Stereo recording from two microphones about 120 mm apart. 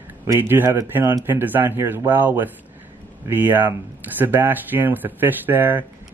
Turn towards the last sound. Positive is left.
turn(degrees=-15)  # may be behind; listen again after turning